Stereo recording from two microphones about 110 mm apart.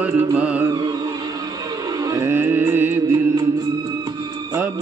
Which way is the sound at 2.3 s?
20° right (ahead or behind).